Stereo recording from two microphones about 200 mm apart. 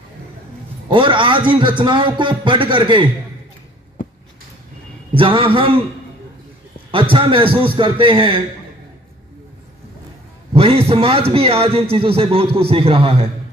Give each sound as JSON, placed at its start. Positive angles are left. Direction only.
{"t": 0.8, "sound": "a man's voice", "side_deg": -25}
{"t": 5.1, "sound": "a man's voice", "side_deg": -25}
{"t": 6.9, "sound": "a man's voice", "side_deg": -25}
{"t": 10.5, "sound": "a man's voice", "side_deg": -30}